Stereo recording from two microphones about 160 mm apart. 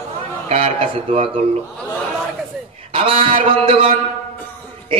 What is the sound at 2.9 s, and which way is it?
Speech, 35° right (ahead or behind).